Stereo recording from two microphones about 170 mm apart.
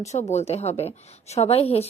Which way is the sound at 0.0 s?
40° left (ahead or behind).